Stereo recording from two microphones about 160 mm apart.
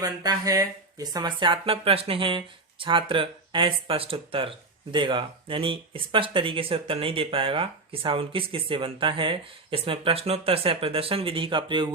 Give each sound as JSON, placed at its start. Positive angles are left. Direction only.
{"t": 0.0, "sound": "speech", "side_deg": -25}